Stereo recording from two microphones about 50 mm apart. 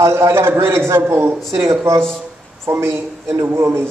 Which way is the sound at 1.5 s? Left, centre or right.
Right.